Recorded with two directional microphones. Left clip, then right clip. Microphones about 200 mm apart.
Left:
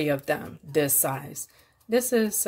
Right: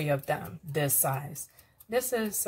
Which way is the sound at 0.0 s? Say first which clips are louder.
Left 4 dB; 45° left (ahead or behind).